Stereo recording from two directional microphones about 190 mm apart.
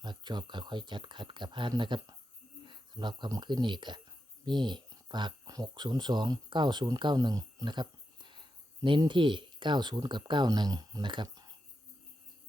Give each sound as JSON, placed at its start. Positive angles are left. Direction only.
{"t": 0.0, "sound": "speech", "side_deg": -20}